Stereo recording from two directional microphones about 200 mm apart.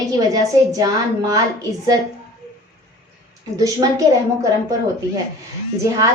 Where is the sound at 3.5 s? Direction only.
15° right (ahead or behind).